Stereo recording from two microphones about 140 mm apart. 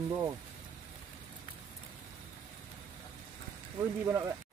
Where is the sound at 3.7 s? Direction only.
20° right (ahead or behind).